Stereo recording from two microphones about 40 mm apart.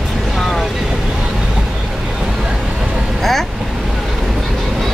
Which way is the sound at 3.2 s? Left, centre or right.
Centre.